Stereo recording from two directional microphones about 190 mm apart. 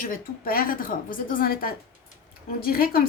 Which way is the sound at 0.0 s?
50° left (ahead or behind).